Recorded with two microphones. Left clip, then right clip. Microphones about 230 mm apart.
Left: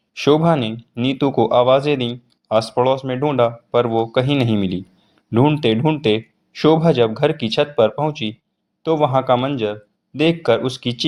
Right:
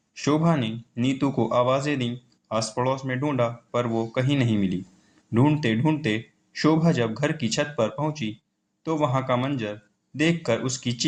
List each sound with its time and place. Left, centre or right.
0.1 s speech: left